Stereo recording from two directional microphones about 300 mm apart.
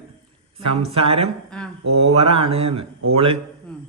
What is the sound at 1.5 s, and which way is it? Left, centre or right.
Speech, centre.